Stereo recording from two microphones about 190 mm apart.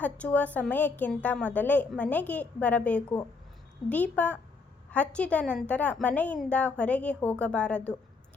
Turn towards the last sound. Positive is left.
turn(degrees=5)  # may be behind; listen again after turning